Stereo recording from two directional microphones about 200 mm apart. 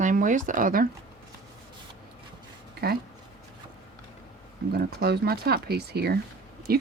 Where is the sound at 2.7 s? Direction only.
50° right (ahead or behind).